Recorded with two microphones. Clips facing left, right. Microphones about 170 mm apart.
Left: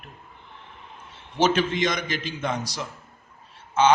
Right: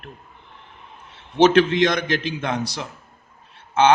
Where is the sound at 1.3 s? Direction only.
65° right (ahead or behind).